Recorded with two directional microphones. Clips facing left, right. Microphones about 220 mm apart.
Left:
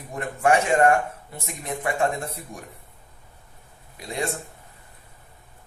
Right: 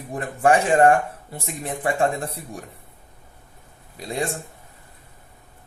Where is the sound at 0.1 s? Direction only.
30° right (ahead or behind).